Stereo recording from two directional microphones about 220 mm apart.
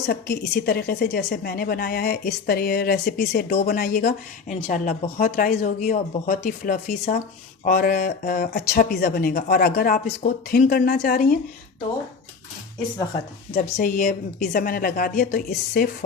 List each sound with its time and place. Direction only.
0.0 s a woman's voice: 50° left (ahead or behind)
13.5 s speech: 45° left (ahead or behind)